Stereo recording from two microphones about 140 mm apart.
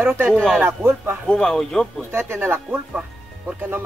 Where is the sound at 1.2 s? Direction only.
5° left (ahead or behind).